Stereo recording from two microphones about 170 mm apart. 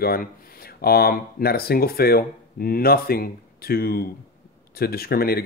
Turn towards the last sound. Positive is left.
turn(degrees=65)  # may be behind; listen again after turning